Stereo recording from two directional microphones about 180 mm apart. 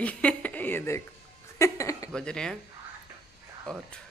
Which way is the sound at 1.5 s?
15° left (ahead or behind).